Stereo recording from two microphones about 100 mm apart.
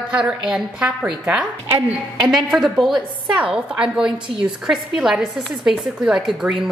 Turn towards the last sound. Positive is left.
turn(degrees=-5)  # may be behind; listen again after turning